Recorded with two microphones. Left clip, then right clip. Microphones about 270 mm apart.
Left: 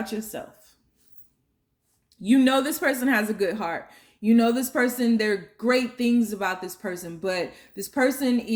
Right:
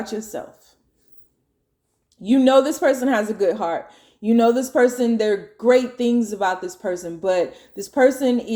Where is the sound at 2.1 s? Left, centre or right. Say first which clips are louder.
Right 2 dB; left.